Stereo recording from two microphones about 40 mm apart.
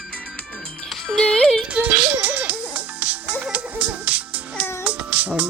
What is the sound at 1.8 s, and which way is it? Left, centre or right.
Music, right.